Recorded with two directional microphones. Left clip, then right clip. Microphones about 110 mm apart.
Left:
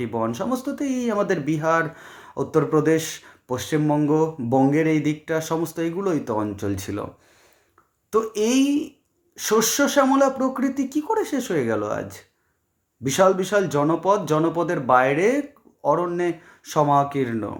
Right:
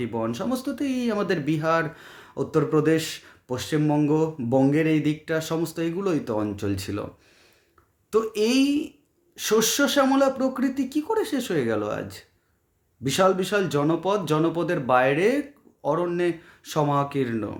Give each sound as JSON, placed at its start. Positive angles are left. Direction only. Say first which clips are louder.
{"t": 0.0, "sound": "speech", "louder": "left 3 dB", "side_deg": -10}
{"t": 8.1, "sound": "speech", "louder": "left 1 dB", "side_deg": -15}